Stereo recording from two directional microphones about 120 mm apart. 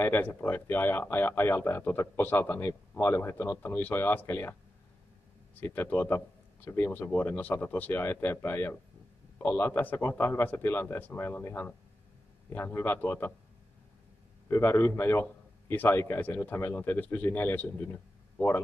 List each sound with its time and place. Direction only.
0.0 s speech: 15° left (ahead or behind)
14.5 s a man's voice: 20° left (ahead or behind)